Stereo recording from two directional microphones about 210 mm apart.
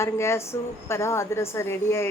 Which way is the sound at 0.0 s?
15° left (ahead or behind).